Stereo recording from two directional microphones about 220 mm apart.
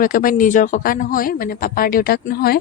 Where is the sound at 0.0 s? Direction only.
40° left (ahead or behind).